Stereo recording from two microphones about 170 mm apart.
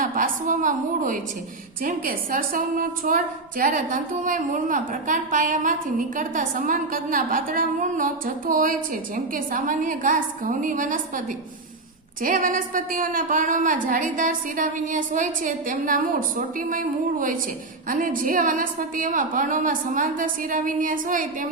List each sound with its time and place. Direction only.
0.0 s a woman's voice: 50° right (ahead or behind)
12.2 s a woman's voice: 55° right (ahead or behind)